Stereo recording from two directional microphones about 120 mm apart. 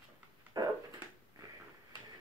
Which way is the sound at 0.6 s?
35° right (ahead or behind).